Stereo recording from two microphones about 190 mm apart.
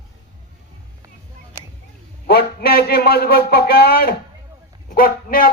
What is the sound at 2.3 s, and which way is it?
A man's voice, 55° left (ahead or behind).